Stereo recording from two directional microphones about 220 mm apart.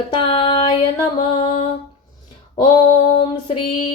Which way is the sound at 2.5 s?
20° left (ahead or behind).